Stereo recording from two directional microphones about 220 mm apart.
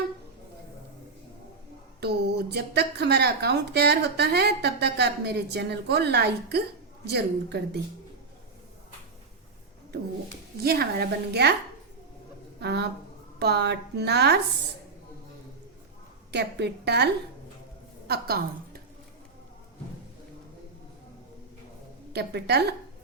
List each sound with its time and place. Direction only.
2.0 s a woman's voice: 50° right (ahead or behind)
10.6 s a woman's voice: 45° right (ahead or behind)
12.5 s a woman's voice: 50° right (ahead or behind)
16.3 s a woman's voice: 50° right (ahead or behind)
18.1 s a woman's voice: 45° right (ahead or behind)
22.1 s a woman's voice: 50° right (ahead or behind)